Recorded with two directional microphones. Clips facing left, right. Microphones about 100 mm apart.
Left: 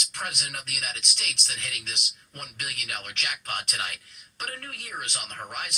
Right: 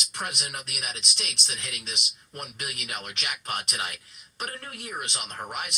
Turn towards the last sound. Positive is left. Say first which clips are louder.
# right 2 dB
turn(degrees=-20)  # may be behind; listen again after turning